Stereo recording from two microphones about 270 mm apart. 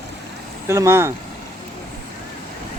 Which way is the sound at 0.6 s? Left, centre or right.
Centre.